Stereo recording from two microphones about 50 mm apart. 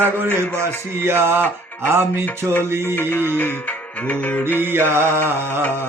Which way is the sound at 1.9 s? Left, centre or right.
Right.